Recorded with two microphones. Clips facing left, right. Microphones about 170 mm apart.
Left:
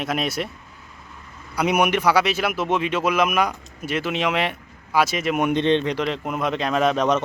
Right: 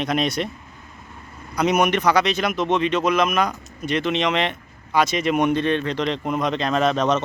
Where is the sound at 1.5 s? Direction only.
10° left (ahead or behind).